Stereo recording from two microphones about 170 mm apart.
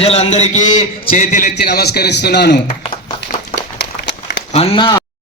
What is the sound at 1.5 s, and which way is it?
A man's voice, 70° left (ahead or behind).